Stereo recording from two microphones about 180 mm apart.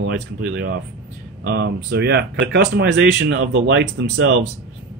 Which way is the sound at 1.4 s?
60° right (ahead or behind).